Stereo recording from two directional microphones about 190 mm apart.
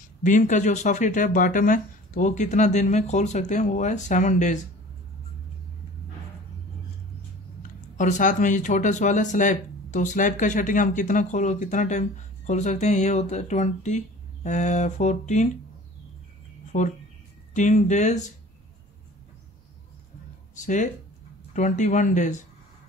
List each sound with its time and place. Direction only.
0.2 s speech: 40° left (ahead or behind)
8.0 s speech: 40° left (ahead or behind)
16.7 s speech: 40° left (ahead or behind)
20.5 s speech: 40° left (ahead or behind)